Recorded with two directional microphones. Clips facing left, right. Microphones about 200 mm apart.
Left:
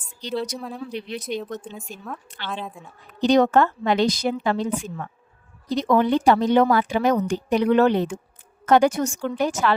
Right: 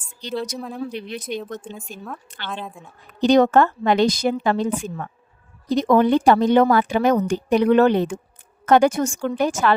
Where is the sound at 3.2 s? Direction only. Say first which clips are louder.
Right 2 dB; 50° right (ahead or behind).